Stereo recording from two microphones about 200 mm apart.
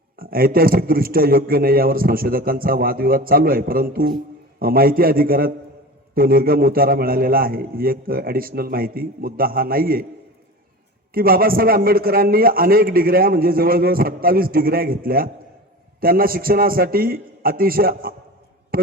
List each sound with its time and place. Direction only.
0.2 s a man's voice: 45° right (ahead or behind)
11.1 s a man's voice: 45° right (ahead or behind)
18.7 s a sound: 45° right (ahead or behind)